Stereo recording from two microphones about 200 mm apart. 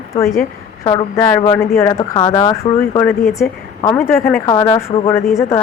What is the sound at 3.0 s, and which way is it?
Speech, centre (ahead or behind).